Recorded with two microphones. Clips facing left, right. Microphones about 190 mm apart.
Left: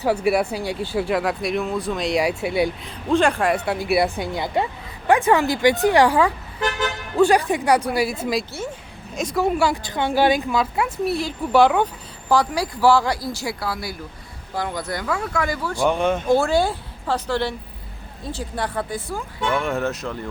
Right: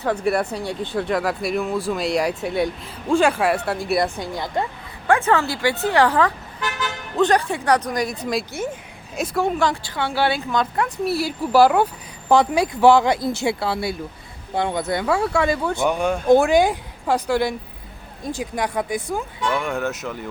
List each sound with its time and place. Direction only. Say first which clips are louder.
0.0 s speech: left 2 dB; 10° left (ahead or behind)
2.8 s speech: right 1 dB; 5° right (ahead or behind)
4.2 s a woman's voice: left 2 dB; 15° left (ahead or behind)
9.8 s a woman's voice: left 3 dB; 20° left (ahead or behind)
11.0 s speech: right 1 dB; 5° right (ahead or behind)
12.3 s speech: right 3 dB; 20° right (ahead or behind)
15.9 s speech: left 3 dB; centre (ahead or behind)
16.3 s a woman's voice: right 6 dB; 15° right (ahead or behind)
19.5 s speech: left 3 dB; centre (ahead or behind)